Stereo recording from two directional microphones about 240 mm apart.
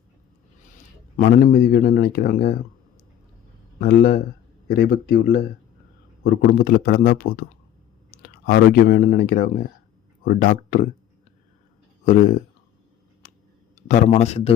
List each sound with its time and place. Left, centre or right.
1.1 s speech: left
3.8 s speech: left
8.4 s speech: left
12.0 s a man's voice: left
13.2 s a sound: left
13.8 s a man's voice: left